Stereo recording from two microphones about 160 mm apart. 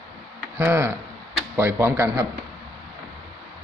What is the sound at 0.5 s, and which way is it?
Speech, 15° right (ahead or behind).